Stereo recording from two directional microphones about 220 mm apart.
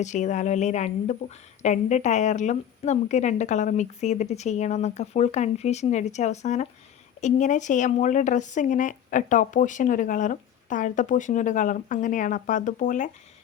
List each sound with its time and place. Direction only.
0.0 s a woman's voice: 35° left (ahead or behind)